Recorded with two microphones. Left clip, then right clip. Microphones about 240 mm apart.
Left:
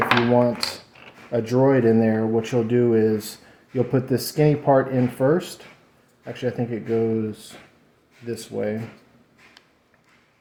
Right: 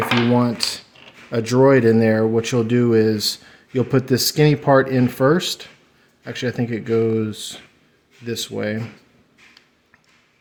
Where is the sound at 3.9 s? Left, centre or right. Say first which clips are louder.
Right 5 dB; right.